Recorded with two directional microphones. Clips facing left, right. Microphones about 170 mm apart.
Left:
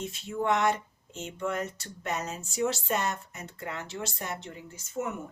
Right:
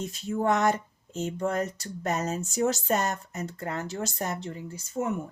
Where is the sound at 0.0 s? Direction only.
40° right (ahead or behind).